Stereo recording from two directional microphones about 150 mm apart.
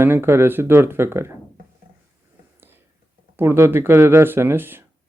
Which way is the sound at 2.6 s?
15° right (ahead or behind).